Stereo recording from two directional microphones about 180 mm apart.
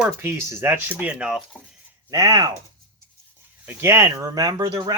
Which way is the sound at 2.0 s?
20° right (ahead or behind).